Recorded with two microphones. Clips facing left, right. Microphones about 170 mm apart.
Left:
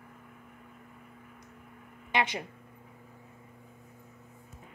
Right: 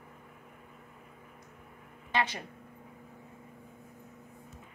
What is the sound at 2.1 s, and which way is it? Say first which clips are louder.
Speech: left 2 dB; 15° left (ahead or behind).